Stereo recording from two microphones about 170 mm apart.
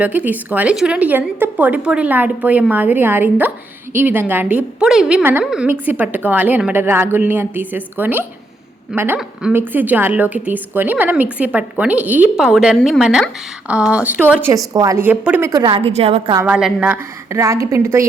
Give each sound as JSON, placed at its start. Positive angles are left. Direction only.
{"t": 0.0, "sound": "a woman's voice", "side_deg": -10}
{"t": 15.6, "sound": "a woman's voice", "side_deg": -35}
{"t": 16.5, "sound": "a woman's voice", "side_deg": -5}